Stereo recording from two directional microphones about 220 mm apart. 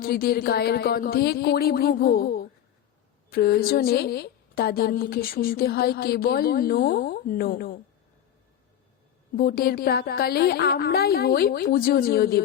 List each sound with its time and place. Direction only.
0.0 s a woman's voice: 45° left (ahead or behind)
9.4 s a woman's voice: 45° left (ahead or behind)